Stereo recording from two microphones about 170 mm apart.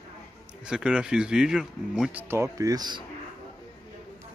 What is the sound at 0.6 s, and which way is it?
Speech, 5° right (ahead or behind).